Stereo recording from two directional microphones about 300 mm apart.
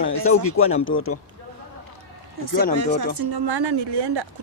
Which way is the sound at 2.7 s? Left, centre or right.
Right.